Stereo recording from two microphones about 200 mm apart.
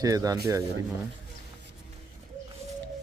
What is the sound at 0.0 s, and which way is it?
Speech, 15° right (ahead or behind).